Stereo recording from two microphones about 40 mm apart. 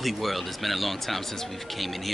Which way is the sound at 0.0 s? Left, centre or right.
Centre.